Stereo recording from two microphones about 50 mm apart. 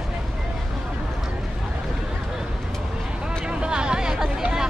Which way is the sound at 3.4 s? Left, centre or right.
Centre.